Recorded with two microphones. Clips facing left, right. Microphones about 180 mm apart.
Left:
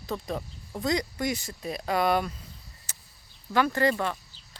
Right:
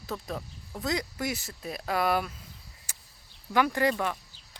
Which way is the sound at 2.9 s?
10° right (ahead or behind).